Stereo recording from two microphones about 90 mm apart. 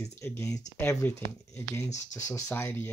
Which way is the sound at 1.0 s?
20° left (ahead or behind).